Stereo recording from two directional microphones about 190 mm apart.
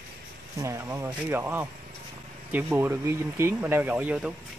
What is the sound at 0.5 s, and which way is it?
Speech, 15° right (ahead or behind).